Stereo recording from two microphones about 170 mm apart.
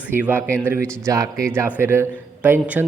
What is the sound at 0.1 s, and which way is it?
A man's voice, 10° right (ahead or behind).